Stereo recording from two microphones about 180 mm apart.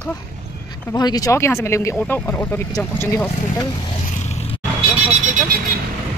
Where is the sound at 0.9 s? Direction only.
20° left (ahead or behind).